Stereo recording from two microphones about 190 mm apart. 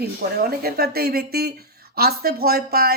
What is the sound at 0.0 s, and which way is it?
Speech, 55° right (ahead or behind).